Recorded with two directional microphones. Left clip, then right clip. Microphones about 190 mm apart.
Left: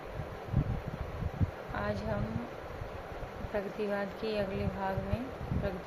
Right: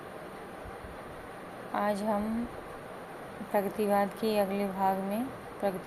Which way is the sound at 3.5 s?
25° right (ahead or behind).